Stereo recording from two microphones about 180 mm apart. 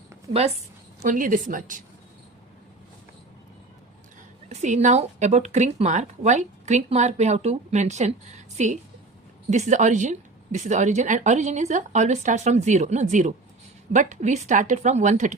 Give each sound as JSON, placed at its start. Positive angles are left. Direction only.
{"t": 0.3, "sound": "a woman's voice", "side_deg": -35}
{"t": 1.0, "sound": "a woman's voice", "side_deg": -45}
{"t": 4.4, "sound": "a woman's voice", "side_deg": -40}